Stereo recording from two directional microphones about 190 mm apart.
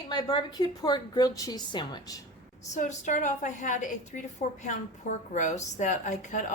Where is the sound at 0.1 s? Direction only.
25° left (ahead or behind).